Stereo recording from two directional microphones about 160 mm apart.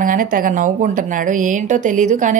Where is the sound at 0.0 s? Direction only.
55° right (ahead or behind).